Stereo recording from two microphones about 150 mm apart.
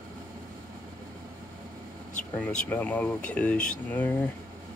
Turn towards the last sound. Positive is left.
turn(degrees=10)  # may be behind; listen again after turning